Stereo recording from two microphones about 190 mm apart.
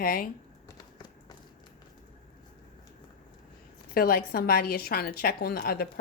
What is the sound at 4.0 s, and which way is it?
Speech, 50° left (ahead or behind).